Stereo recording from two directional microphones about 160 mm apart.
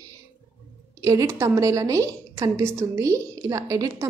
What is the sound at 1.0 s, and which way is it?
A woman's voice, 20° right (ahead or behind).